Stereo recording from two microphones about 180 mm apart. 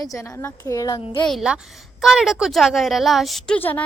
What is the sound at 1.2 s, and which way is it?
A woman's voice, centre (ahead or behind).